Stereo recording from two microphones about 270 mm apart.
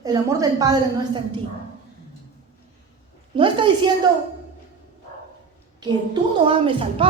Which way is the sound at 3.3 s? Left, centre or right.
Centre.